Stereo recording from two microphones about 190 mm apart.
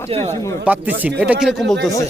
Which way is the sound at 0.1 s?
35° right (ahead or behind).